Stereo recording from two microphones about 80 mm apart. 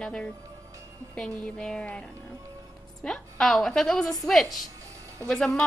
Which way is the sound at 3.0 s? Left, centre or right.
Centre.